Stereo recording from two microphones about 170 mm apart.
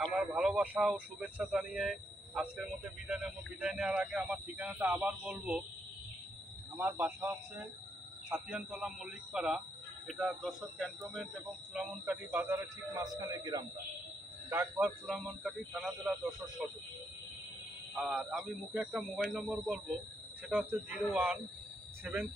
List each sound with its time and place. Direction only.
0.1 s speech: 5° right (ahead or behind)
6.8 s speech: 10° right (ahead or behind)
15.0 s speech: centre (ahead or behind)
17.9 s speech: centre (ahead or behind)